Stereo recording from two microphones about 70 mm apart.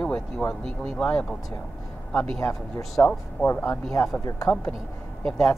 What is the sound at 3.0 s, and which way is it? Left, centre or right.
Speech, left.